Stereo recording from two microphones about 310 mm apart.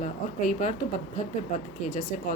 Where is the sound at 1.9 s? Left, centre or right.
Left.